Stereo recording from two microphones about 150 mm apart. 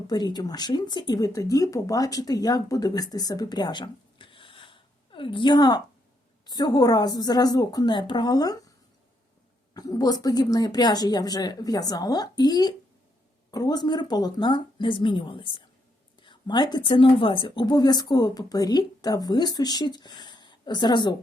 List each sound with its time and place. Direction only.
0.1 s speech: 25° left (ahead or behind)
9.7 s speech: 25° left (ahead or behind)